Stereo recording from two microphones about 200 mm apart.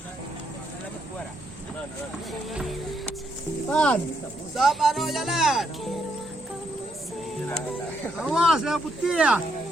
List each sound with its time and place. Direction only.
2.5 s music: centre (ahead or behind)
3.7 s speech: 5° left (ahead or behind)
8.0 s speech: centre (ahead or behind)